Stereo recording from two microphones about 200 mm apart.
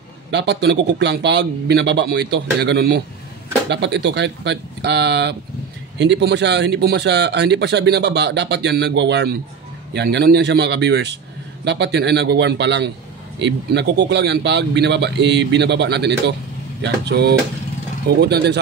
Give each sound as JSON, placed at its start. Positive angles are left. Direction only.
{"t": 0.3, "sound": "speech", "side_deg": -60}